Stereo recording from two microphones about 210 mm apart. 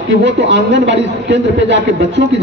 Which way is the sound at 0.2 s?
55° right (ahead or behind).